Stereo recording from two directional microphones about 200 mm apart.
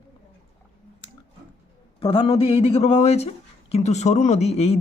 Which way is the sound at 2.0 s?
25° left (ahead or behind).